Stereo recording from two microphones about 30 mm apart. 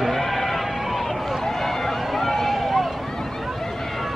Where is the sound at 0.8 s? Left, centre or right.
Centre.